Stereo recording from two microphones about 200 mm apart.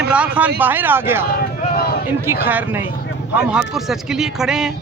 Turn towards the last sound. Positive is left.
turn(degrees=-5)  # may be behind; listen again after turning